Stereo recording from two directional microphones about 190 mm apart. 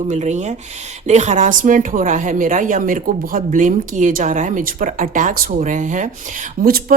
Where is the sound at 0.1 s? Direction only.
40° right (ahead or behind).